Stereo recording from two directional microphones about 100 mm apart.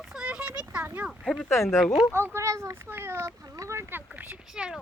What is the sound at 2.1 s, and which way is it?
Speech, 25° right (ahead or behind).